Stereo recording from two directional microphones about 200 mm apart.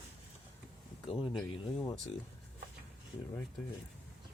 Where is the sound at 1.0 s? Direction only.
25° left (ahead or behind).